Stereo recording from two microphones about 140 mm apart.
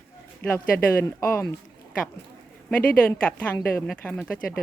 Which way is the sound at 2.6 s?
10° left (ahead or behind).